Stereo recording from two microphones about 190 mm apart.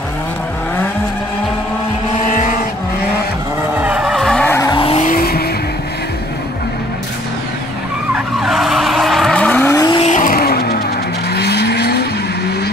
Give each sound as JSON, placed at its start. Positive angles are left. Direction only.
{"t": 3.8, "sound": "vehicle", "side_deg": -5}
{"t": 4.6, "sound": "vehicle", "side_deg": 25}
{"t": 8.1, "sound": "vehicle", "side_deg": 0}
{"t": 9.8, "sound": "vehicle", "side_deg": 20}
{"t": 10.0, "sound": "vehicle", "side_deg": 45}